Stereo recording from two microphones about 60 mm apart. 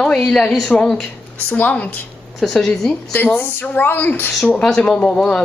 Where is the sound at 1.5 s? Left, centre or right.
Left.